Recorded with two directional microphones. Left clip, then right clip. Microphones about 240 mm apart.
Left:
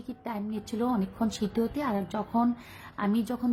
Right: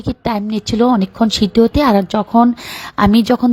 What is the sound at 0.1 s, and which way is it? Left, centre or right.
A woman's voice, right.